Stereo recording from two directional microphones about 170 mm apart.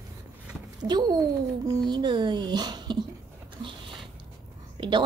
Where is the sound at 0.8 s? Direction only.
25° right (ahead or behind).